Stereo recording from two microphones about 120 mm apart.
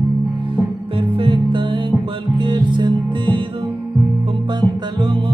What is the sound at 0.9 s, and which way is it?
Music, 45° right (ahead or behind).